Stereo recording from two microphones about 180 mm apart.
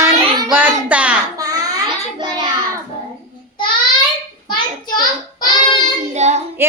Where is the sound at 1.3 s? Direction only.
20° right (ahead or behind).